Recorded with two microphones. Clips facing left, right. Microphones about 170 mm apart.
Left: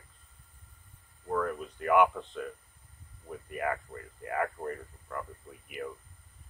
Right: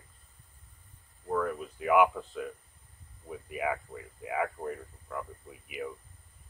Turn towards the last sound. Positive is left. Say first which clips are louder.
# right 1 dB
turn(degrees=-5)  # may be behind; listen again after turning